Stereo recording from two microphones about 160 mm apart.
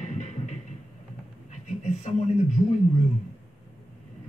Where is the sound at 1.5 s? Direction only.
45° left (ahead or behind).